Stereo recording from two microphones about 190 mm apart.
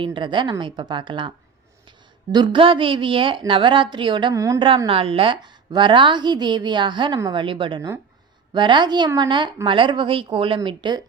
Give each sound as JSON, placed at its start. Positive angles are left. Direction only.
{"t": 0.0, "sound": "a woman's voice", "side_deg": -25}
{"t": 2.3, "sound": "a woman's voice", "side_deg": -25}
{"t": 4.7, "sound": "a woman's voice", "side_deg": -30}